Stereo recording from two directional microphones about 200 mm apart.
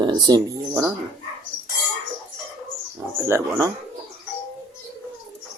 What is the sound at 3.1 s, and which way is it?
Speech, 15° right (ahead or behind).